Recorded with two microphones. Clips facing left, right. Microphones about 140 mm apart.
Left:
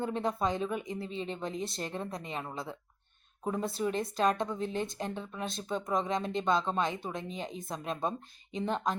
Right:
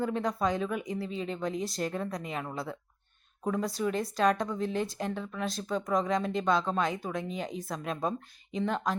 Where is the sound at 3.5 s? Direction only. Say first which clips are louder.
Right 2 dB; 25° left (ahead or behind).